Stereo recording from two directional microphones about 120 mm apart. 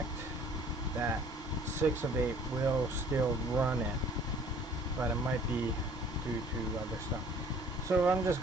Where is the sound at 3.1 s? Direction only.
20° right (ahead or behind).